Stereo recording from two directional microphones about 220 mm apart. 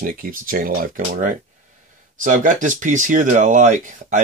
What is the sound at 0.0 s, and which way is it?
Speech, 40° right (ahead or behind).